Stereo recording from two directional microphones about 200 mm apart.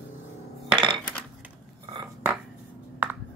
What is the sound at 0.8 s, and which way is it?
Dishes, 25° right (ahead or behind).